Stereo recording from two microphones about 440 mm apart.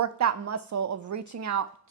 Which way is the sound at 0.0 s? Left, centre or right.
Right.